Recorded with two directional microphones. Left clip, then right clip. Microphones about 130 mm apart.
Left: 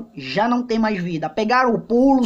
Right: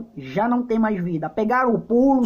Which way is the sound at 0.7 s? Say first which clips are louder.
Left 1 dB; 25° left (ahead or behind).